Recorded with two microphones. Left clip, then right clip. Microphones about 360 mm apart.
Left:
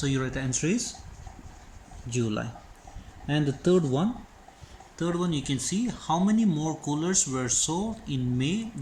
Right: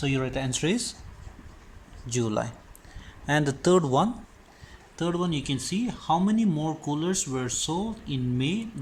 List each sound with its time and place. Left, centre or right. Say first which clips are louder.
0.0 s speech: right 2 dB; centre
2.0 s speech: right 3 dB; centre
4.9 s speech: right 1 dB; centre